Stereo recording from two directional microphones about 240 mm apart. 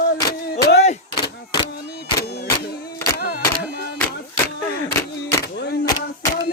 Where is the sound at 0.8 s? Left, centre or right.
Left.